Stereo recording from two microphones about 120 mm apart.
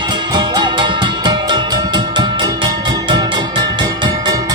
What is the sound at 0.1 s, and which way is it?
Music, 40° right (ahead or behind).